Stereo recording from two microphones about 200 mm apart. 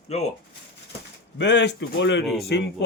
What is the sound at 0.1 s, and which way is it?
Speech, 30° left (ahead or behind).